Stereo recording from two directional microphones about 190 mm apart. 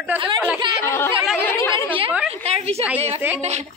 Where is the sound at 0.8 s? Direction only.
15° left (ahead or behind).